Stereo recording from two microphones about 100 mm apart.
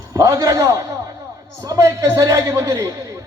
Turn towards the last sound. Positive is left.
turn(degrees=-35)  # may be behind; listen again after turning